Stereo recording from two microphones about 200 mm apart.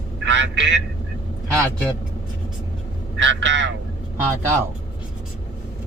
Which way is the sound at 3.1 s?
60° right (ahead or behind).